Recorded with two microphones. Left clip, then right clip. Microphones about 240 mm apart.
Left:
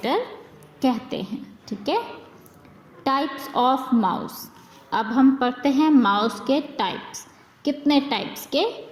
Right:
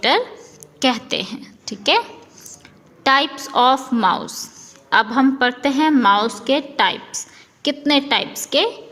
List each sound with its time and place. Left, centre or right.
0.8 s a woman's voice: right